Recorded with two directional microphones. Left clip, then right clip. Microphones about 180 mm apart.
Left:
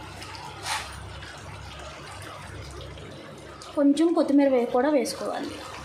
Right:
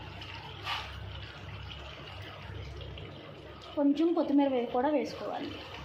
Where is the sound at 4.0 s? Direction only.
35° left (ahead or behind).